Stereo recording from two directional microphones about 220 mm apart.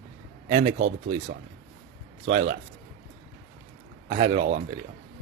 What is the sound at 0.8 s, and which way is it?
Speech, 50° right (ahead or behind).